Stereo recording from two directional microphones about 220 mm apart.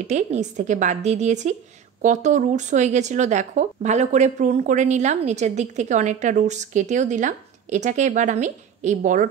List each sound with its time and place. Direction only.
0.0 s speech: 30° right (ahead or behind)